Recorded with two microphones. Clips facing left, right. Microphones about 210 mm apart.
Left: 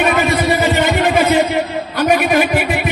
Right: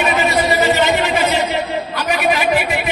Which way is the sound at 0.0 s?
55° left (ahead or behind).